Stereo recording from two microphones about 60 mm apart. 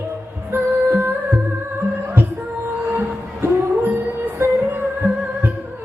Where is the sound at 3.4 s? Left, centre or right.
Right.